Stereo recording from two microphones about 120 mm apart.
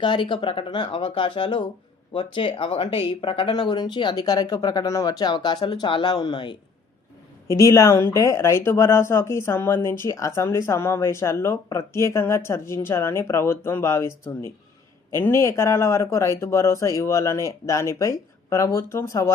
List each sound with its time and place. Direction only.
0.0 s speech: 45° left (ahead or behind)
7.5 s speech: 25° left (ahead or behind)